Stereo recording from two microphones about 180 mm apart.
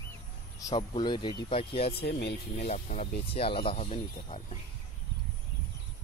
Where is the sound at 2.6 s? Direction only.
40° left (ahead or behind).